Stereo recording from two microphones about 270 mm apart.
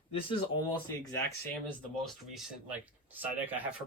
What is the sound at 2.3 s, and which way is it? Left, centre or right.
Speech, centre.